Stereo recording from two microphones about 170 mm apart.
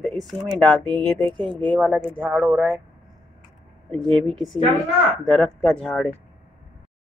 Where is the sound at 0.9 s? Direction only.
30° right (ahead or behind).